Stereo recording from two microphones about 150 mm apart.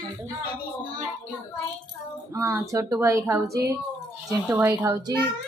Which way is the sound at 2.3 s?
20° right (ahead or behind).